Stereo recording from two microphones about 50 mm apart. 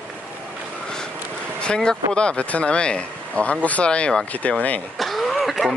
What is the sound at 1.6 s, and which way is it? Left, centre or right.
Speech, centre.